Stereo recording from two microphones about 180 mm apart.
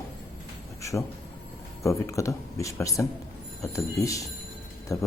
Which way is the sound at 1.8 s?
15° left (ahead or behind).